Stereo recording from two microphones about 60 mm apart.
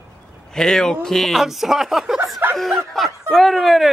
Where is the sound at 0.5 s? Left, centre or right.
Centre.